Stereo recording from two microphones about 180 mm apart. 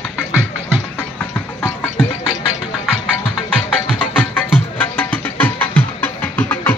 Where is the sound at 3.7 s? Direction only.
10° left (ahead or behind).